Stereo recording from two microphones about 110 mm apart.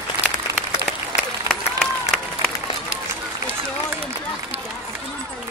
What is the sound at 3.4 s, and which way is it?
Run, 20° right (ahead or behind).